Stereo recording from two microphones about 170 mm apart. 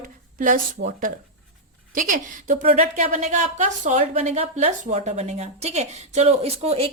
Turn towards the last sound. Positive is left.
turn(degrees=-40)  # may be behind; listen again after turning